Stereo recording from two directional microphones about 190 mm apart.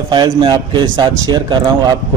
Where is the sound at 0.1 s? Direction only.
25° right (ahead or behind).